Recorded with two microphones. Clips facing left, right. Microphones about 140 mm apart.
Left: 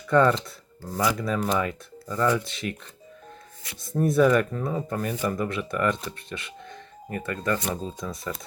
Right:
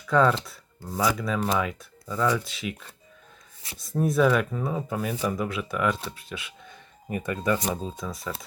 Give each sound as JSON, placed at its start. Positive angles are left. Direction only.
{"t": 0.1, "sound": "speech", "side_deg": 0}
{"t": 3.8, "sound": "speech", "side_deg": 0}
{"t": 7.1, "sound": "speech", "side_deg": -15}